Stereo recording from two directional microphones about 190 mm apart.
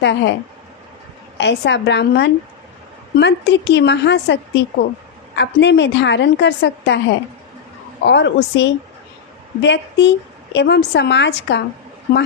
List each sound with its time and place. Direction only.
0.0 s a woman's voice: 70° left (ahead or behind)
1.4 s a woman's voice: 65° left (ahead or behind)